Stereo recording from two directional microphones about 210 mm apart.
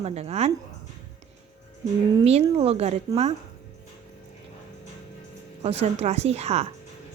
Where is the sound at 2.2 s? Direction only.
30° right (ahead or behind).